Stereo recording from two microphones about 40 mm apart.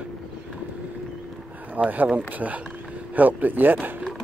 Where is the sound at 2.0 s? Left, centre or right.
Right.